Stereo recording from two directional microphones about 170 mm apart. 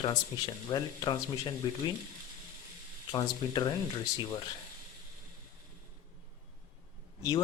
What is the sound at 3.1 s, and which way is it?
Speech, 25° left (ahead or behind).